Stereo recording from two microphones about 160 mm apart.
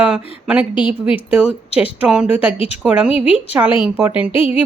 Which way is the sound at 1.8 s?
5° right (ahead or behind).